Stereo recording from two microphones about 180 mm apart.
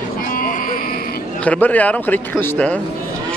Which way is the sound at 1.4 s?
10° left (ahead or behind).